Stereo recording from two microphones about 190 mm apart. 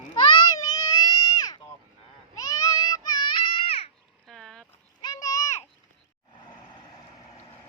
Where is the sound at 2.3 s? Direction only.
20° left (ahead or behind).